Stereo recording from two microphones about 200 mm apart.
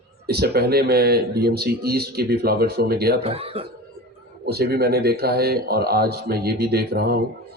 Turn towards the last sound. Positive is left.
turn(degrees=-50)  # may be behind; listen again after turning